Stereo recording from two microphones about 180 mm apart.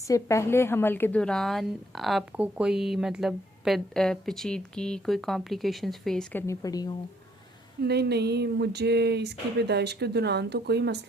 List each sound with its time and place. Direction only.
0.1 s speech: 15° left (ahead or behind)
6.5 s speech: 20° left (ahead or behind)
7.9 s speech: 65° right (ahead or behind)